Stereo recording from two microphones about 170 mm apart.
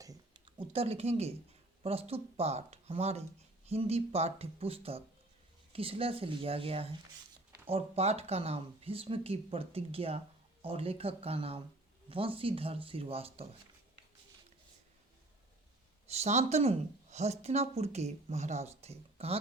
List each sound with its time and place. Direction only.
0.0 s a sound: 25° right (ahead or behind)
1.8 s speech: 35° right (ahead or behind)
16.0 s speech: 40° right (ahead or behind)